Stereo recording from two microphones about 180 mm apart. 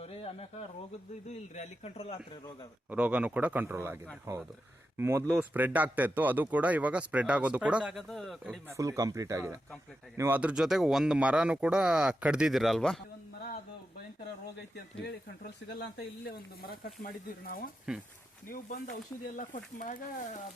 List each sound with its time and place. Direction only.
0.0 s a sound: 35° left (ahead or behind)
1.3 s speech: 35° left (ahead or behind)
2.9 s speech: 5° right (ahead or behind)
8.7 s speech: 15° right (ahead or behind); by 13.0 s centre (ahead or behind)
15.0 s speech: 65° left (ahead or behind)
17.9 s speech: 5° right (ahead or behind)
18.4 s speech: 55° left (ahead or behind)